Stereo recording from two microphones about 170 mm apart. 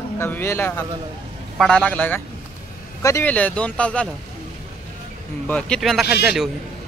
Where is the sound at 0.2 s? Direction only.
15° left (ahead or behind).